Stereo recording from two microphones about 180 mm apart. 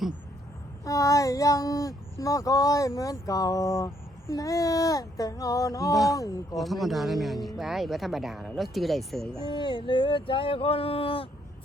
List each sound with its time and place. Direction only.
0.9 s speech: 20° left (ahead or behind)
5.9 s speech: centre (ahead or behind)
6.1 s speech: 20° left (ahead or behind)
6.6 s speech: centre (ahead or behind)
9.4 s speech: 25° left (ahead or behind)